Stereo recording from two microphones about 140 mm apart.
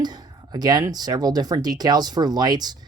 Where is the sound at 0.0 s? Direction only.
30° right (ahead or behind).